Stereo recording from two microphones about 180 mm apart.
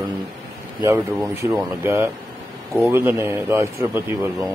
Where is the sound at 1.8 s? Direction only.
15° right (ahead or behind).